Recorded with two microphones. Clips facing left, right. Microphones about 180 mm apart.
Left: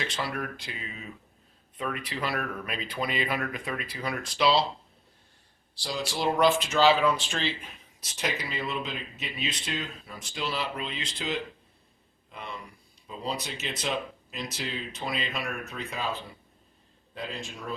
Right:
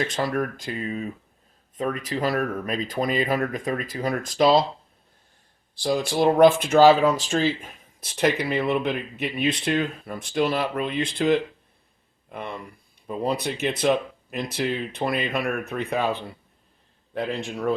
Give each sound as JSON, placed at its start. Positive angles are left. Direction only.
{"t": 0.0, "sound": "speech", "side_deg": -45}
{"t": 5.7, "sound": "speech", "side_deg": -50}
{"t": 17.2, "sound": "speech", "side_deg": -60}